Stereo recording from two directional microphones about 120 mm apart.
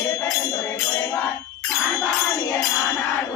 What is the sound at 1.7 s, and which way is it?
Jingle bell, 25° left (ahead or behind).